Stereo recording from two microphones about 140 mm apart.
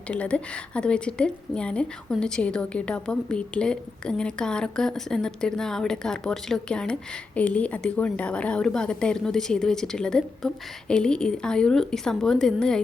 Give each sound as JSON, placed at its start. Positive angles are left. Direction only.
{"t": 0.1, "sound": "a woman's voice", "side_deg": 10}